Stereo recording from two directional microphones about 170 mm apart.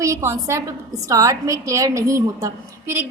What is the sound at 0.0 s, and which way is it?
A woman's voice, 15° right (ahead or behind).